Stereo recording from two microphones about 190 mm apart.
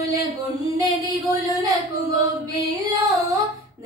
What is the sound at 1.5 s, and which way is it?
Singing, 20° right (ahead or behind).